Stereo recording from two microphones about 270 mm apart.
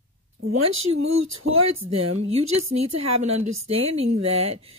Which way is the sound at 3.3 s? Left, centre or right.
Right.